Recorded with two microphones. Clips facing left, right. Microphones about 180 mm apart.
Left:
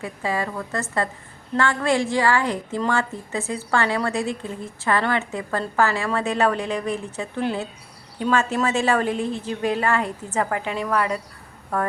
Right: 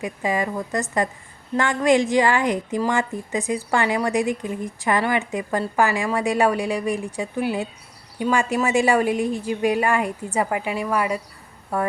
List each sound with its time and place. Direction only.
0.0 s a woman's voice: 15° right (ahead or behind)